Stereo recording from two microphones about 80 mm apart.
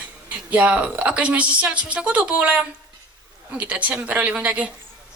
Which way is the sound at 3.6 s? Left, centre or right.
Centre.